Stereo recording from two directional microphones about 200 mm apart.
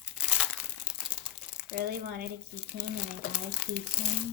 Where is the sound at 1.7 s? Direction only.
50° right (ahead or behind).